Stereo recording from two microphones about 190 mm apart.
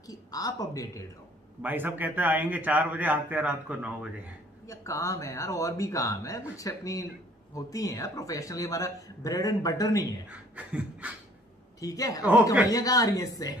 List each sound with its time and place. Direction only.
0.0 s speech: 20° left (ahead or behind)
1.6 s a man's voice: 10° right (ahead or behind)
4.6 s speech: 15° left (ahead or behind)
10.5 s a sound: 5° right (ahead or behind)
11.8 s speech: 20° left (ahead or behind)